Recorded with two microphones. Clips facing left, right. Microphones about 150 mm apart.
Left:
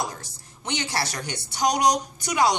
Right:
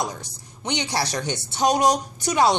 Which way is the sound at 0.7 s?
20° right (ahead or behind).